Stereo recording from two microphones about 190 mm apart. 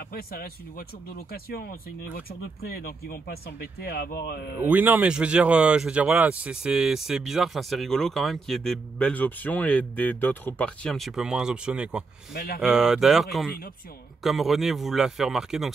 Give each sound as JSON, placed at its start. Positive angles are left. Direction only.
{"t": 0.1, "sound": "speech", "side_deg": 50}
{"t": 4.6, "sound": "speech", "side_deg": -10}
{"t": 12.4, "sound": "speech", "side_deg": 50}
{"t": 12.6, "sound": "speech", "side_deg": -5}